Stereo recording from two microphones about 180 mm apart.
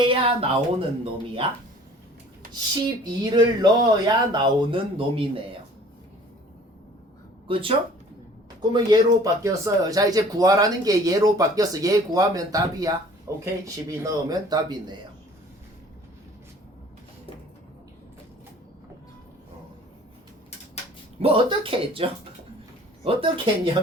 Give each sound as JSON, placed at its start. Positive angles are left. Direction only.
{"t": 0.0, "sound": "a woman's voice", "side_deg": -30}
{"t": 3.0, "sound": "speech", "side_deg": -20}
{"t": 7.4, "sound": "speech", "side_deg": -30}
{"t": 8.7, "sound": "speech", "side_deg": -20}
{"t": 21.2, "sound": "speech", "side_deg": -30}